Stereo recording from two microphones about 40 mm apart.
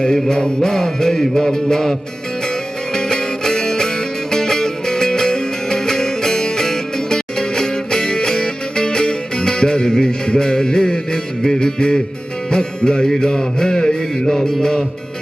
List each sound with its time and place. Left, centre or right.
0.0 s music: centre